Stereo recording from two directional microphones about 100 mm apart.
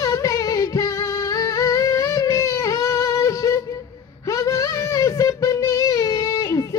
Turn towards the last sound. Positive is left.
turn(degrees=30)  # may be behind; listen again after turning